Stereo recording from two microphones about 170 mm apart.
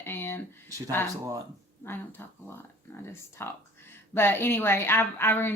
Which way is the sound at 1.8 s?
15° left (ahead or behind).